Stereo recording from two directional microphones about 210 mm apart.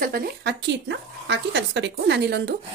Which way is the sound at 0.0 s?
45° right (ahead or behind).